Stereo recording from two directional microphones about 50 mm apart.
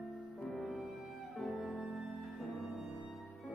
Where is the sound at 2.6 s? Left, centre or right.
Right.